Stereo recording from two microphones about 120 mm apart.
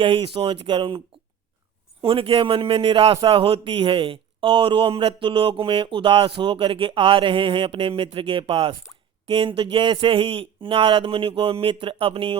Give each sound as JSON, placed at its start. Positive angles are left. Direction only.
{"t": 0.0, "sound": "a man's voice", "side_deg": -50}